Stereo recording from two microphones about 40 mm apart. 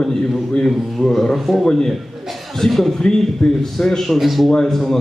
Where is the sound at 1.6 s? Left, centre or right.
Centre.